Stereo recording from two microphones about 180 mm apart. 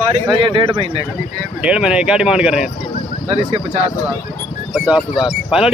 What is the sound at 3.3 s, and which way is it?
Speech, 35° right (ahead or behind).